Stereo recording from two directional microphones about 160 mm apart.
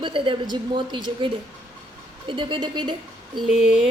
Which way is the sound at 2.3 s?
30° right (ahead or behind).